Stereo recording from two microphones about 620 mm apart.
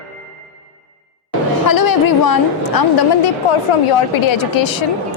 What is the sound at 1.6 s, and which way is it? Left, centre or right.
A woman's voice, left.